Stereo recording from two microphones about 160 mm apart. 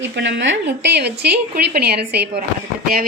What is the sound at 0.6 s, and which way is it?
A woman's voice, 90° right.